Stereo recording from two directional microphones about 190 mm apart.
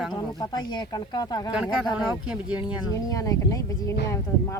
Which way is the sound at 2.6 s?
20° left (ahead or behind).